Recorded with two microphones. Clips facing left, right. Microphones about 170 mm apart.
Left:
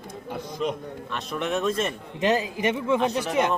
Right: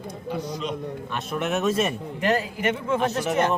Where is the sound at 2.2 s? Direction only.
20° left (ahead or behind).